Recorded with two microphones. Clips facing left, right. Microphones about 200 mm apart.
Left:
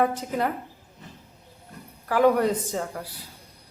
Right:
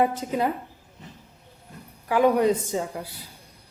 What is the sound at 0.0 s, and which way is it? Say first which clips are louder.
Speech: right 1 dB; 15° right (ahead or behind).